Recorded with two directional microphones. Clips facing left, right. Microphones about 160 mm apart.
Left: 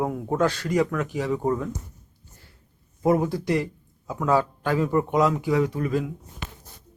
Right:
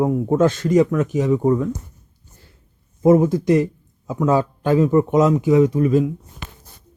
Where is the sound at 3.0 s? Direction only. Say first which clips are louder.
Right 8 dB; 20° right (ahead or behind).